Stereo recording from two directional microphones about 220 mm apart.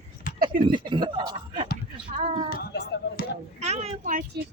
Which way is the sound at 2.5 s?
45° left (ahead or behind).